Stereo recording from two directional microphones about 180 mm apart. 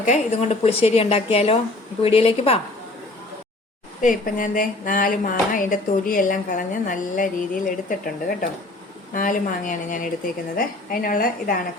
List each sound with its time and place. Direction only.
0.0 s a woman's voice: 40° left (ahead or behind)
4.0 s speech: 50° left (ahead or behind)